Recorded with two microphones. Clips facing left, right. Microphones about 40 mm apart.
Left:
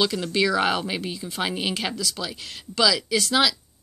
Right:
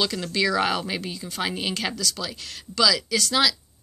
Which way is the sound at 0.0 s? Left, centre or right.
Centre.